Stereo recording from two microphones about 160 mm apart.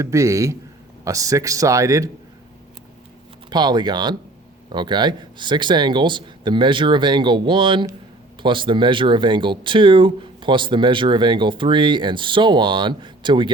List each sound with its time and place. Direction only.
0.0 s speech: 20° right (ahead or behind)
3.5 s speech: 25° right (ahead or behind)